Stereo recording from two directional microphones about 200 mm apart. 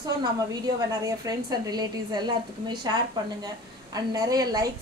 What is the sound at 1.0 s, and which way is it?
A woman's voice, 20° right (ahead or behind).